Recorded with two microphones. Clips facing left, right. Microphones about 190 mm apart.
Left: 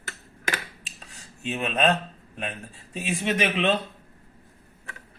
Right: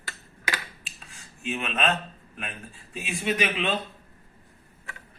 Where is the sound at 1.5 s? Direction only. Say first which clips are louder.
Left 5 dB; 35° left (ahead or behind).